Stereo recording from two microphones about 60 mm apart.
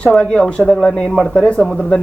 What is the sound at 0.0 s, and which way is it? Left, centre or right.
Speech, centre.